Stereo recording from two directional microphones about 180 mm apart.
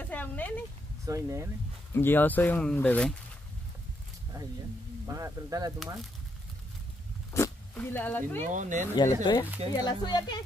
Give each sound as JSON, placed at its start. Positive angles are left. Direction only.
{"t": 0.0, "sound": "a sound", "side_deg": 10}
{"t": 1.0, "sound": "speech", "side_deg": -15}
{"t": 2.0, "sound": "speech", "side_deg": 10}
{"t": 5.0, "sound": "speech", "side_deg": -20}
{"t": 7.7, "sound": "speech", "side_deg": 10}
{"t": 8.4, "sound": "speech", "side_deg": -40}
{"t": 8.9, "sound": "speech", "side_deg": 25}